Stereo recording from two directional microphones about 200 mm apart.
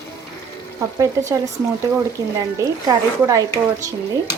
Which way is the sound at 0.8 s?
20° right (ahead or behind).